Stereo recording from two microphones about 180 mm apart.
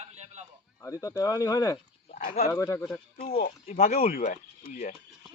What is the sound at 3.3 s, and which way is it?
Speech, 40° left (ahead or behind).